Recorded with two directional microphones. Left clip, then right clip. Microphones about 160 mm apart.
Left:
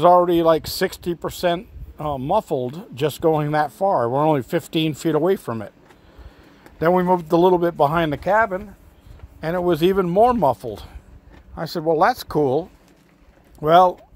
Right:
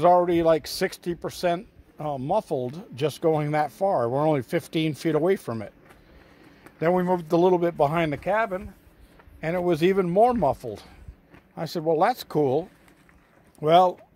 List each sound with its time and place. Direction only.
0.0 s speech: 5° left (ahead or behind)
6.8 s speech: 10° left (ahead or behind)
9.4 s speech: centre (ahead or behind)
11.5 s speech: centre (ahead or behind)